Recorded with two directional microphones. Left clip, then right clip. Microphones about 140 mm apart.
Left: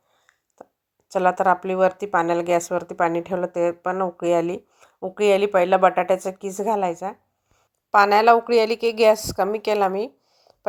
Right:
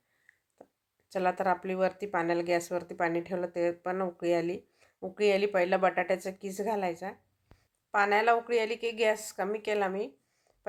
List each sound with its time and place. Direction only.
1.1 s a woman's voice: 30° left (ahead or behind)
4.9 s a woman's voice: 20° left (ahead or behind)
7.9 s a woman's voice: 60° left (ahead or behind)